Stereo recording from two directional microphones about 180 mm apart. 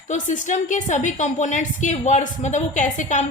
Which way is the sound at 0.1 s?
45° left (ahead or behind).